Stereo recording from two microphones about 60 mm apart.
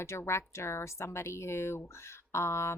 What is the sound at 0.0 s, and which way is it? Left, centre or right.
Speech, left.